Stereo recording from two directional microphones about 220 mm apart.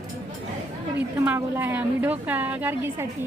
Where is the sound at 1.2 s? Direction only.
10° right (ahead or behind).